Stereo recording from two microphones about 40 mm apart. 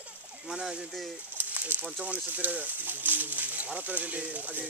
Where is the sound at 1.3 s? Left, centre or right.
Right.